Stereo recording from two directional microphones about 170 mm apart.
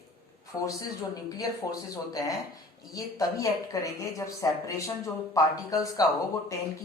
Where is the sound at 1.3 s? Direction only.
20° left (ahead or behind).